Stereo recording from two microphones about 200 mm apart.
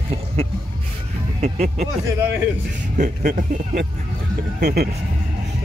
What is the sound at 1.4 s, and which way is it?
Speech, 35° right (ahead or behind).